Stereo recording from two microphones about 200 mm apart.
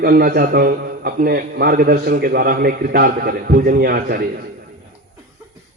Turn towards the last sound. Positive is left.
turn(degrees=-50)  # may be behind; listen again after turning